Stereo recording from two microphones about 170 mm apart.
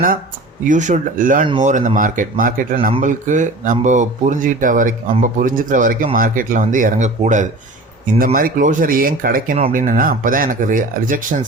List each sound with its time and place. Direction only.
0.6 s speech: 45° right (ahead or behind)
8.2 s speech: 55° right (ahead or behind)